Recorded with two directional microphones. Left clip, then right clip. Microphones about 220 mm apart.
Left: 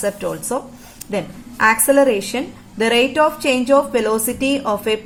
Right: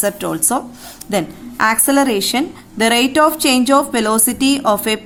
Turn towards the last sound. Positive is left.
turn(degrees=-40)  # may be behind; listen again after turning